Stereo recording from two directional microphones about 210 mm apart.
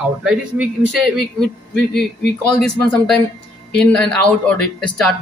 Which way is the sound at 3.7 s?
5° left (ahead or behind).